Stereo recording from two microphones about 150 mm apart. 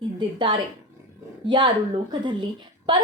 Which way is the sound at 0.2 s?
30° right (ahead or behind).